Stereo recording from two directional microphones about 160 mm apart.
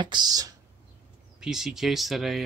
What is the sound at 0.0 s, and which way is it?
Speech, 25° right (ahead or behind).